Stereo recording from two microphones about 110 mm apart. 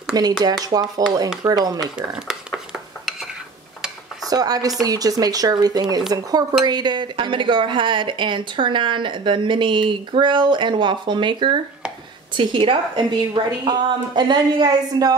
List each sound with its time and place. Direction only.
0.1 s speech: 35° right (ahead or behind)
2.0 s dishes: 5° right (ahead or behind)
4.3 s speech: 35° right (ahead or behind)